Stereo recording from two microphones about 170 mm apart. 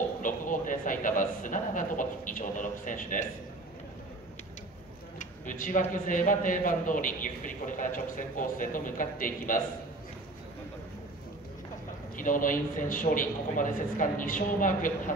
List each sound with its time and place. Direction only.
0.2 s a sound: 50° left (ahead or behind)
5.2 s a man's voice: 50° left (ahead or behind)
12.2 s a man's voice: 50° left (ahead or behind)